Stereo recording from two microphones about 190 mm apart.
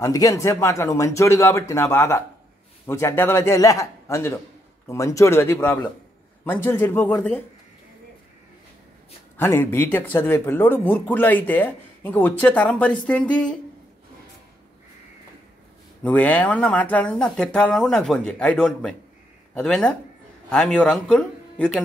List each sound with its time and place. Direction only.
0.0 s speech: 15° left (ahead or behind)
9.4 s speech: 10° left (ahead or behind)
16.0 s speech: 10° left (ahead or behind)